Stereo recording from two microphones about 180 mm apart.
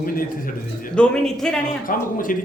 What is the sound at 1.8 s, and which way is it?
Speech, 50° left (ahead or behind).